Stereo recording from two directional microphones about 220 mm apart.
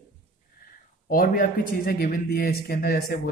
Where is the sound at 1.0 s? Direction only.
40° left (ahead or behind).